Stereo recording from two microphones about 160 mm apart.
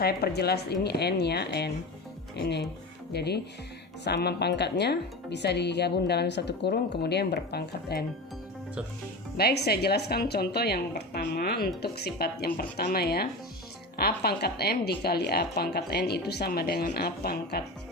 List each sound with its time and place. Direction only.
0.0 s speech: 80° left
9.4 s a woman's voice: 85° left
11.8 s a woman's voice: 90° left